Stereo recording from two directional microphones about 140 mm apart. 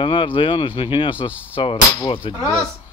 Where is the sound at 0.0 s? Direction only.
40° left (ahead or behind).